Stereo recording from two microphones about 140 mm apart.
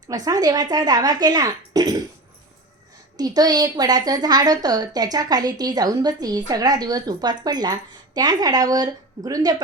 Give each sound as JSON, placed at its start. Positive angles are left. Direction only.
{"t": 0.1, "sound": "a woman's voice", "side_deg": -25}
{"t": 3.2, "sound": "a woman's voice", "side_deg": -25}